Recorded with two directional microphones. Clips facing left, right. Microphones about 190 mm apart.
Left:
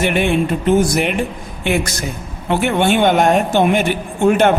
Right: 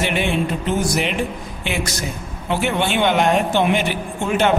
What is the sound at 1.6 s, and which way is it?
A man's voice, 50° left (ahead or behind).